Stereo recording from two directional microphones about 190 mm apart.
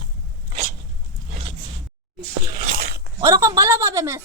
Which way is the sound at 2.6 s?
45° right (ahead or behind).